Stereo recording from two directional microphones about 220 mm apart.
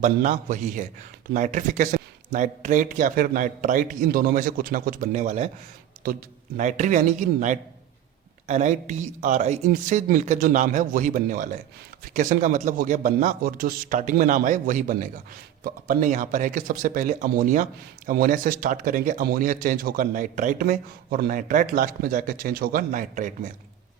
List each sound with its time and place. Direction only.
0.0 s speech: 35° right (ahead or behind)